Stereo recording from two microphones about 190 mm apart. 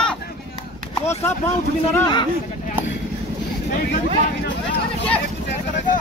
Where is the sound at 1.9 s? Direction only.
20° left (ahead or behind).